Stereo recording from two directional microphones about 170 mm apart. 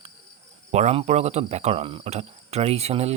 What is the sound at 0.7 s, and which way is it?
Cricket, 40° right (ahead or behind).